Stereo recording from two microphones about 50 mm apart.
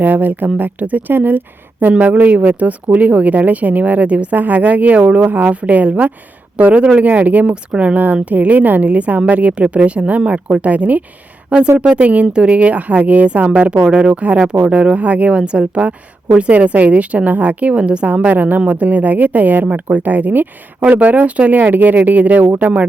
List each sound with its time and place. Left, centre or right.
0.0 s speech: right
7.4 s speech: centre